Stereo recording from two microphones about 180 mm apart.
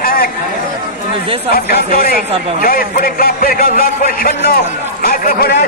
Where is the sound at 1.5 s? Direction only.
55° left (ahead or behind).